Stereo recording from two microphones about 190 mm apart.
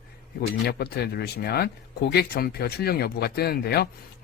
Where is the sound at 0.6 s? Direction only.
60° left (ahead or behind).